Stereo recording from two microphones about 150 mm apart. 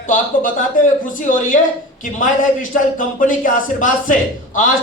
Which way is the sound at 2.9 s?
60° left (ahead or behind).